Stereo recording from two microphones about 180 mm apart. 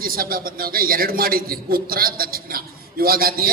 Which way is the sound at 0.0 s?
55° right (ahead or behind).